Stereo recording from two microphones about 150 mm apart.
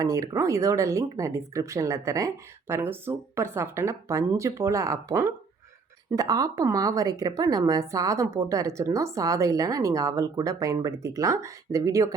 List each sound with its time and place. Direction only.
0.0 s speech: 20° right (ahead or behind)